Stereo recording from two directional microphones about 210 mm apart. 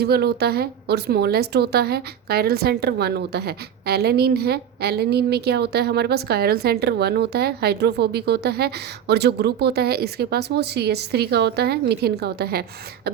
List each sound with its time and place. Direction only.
0.0 s a woman's voice: 50° right (ahead or behind)